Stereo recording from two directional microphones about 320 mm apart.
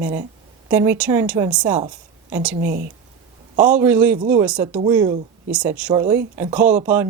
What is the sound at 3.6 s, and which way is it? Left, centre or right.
A man's voice, centre.